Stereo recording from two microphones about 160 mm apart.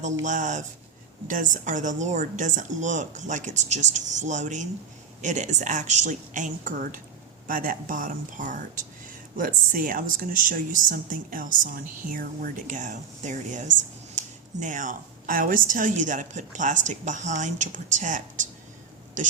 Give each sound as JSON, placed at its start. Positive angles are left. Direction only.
{"t": 0.0, "sound": "a woman's voice", "side_deg": -50}